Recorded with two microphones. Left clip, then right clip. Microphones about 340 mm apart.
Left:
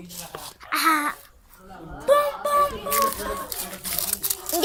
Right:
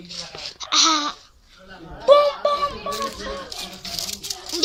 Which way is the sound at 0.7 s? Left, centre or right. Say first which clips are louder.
Right 3 dB; centre.